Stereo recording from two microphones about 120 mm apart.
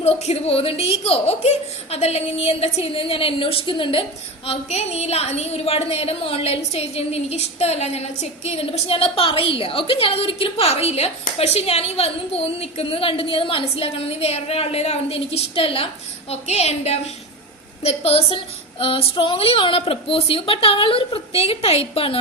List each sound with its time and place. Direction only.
0.0 s a woman's voice: 60° left (ahead or behind)
4.4 s a woman's voice: 65° left (ahead or behind)